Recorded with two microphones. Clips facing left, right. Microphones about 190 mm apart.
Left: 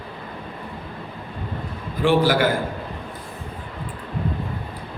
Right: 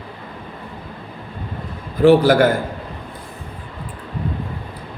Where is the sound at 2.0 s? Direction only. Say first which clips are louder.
Right 6 dB; 40° right (ahead or behind).